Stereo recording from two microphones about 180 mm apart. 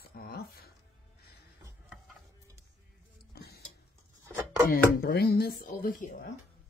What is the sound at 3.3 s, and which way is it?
Tick-tock, 65° left (ahead or behind).